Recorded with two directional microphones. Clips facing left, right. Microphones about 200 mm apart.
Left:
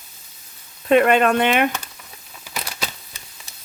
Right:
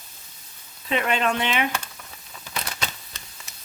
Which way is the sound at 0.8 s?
55° left (ahead or behind).